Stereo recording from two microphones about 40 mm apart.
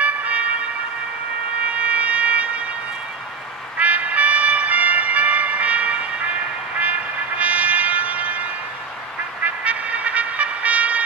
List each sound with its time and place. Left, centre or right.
0.0 s emergency vehicle: right
1.7 s siren: right
3.7 s music: right
6.8 s trumpet: right